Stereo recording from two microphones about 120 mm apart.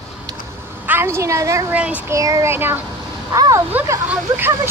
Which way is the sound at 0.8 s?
15° right (ahead or behind).